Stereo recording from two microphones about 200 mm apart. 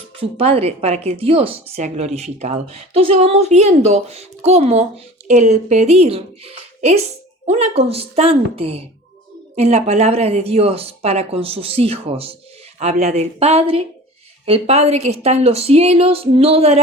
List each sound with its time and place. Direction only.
0.2 s speech: 30° right (ahead or behind)